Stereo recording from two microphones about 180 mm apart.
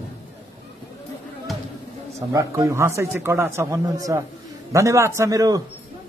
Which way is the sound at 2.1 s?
15° right (ahead or behind).